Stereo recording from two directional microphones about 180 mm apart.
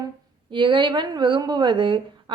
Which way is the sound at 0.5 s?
25° right (ahead or behind).